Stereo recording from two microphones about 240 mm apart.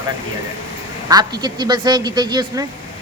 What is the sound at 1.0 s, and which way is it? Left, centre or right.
A man's voice, centre.